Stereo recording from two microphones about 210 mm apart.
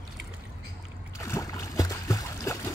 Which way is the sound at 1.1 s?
15° left (ahead or behind).